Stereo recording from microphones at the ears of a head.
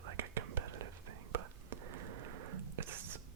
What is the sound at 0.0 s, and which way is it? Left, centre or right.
Whispering, right.